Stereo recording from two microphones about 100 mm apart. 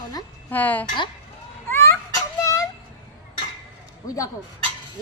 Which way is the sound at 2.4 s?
35° left (ahead or behind).